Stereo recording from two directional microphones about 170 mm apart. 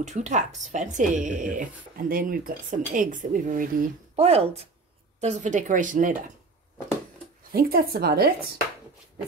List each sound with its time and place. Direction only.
0.0 s a woman's voice: 45° right (ahead or behind)
4.2 s a woman's voice: 35° right (ahead or behind)
7.5 s speech: 60° right (ahead or behind)